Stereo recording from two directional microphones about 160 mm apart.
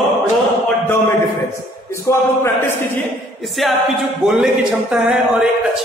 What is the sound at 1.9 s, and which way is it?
Music, 15° left (ahead or behind).